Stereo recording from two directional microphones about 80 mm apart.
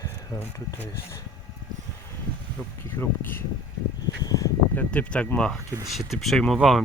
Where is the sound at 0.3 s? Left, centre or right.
Left.